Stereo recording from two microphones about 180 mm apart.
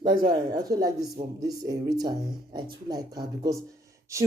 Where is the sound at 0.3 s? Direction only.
20° right (ahead or behind).